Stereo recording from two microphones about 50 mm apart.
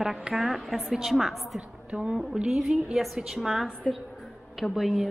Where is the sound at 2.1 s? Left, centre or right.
Centre.